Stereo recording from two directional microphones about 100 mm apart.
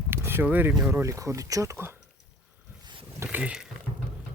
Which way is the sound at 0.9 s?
30° right (ahead or behind).